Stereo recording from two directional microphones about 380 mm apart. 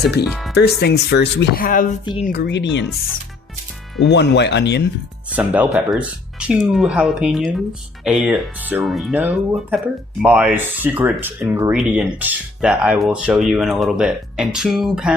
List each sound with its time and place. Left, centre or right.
0.3 s music: centre
0.5 s speech: left
4.0 s speech: left
5.3 s speech: centre